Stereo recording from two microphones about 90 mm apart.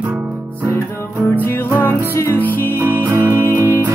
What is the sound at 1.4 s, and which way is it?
Music, 25° left (ahead or behind).